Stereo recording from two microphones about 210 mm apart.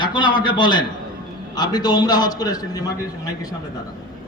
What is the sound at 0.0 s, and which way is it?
A man's voice, 20° left (ahead or behind).